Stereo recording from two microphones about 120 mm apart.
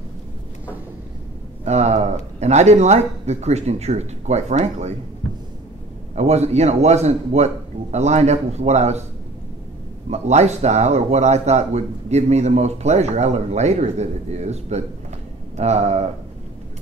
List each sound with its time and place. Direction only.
1.6 s speech: 65° right (ahead or behind)
6.1 s speech: 65° right (ahead or behind)
10.0 s speech: 65° right (ahead or behind)